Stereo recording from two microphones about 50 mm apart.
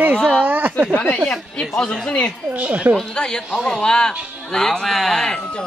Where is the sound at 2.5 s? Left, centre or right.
Right.